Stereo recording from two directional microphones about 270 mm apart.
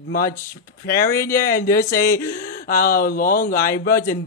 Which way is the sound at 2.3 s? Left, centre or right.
Left.